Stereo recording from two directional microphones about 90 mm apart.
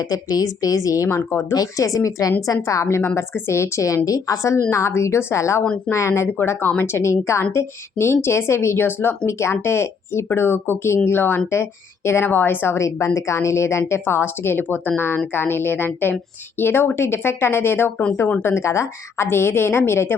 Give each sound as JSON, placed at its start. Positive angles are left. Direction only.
{"t": 0.0, "sound": "a woman's voice", "side_deg": 45}